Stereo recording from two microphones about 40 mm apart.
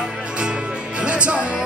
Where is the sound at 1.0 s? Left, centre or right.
Right.